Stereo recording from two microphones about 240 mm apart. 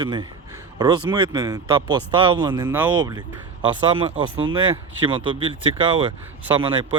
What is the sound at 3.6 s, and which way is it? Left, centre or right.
Speech, right.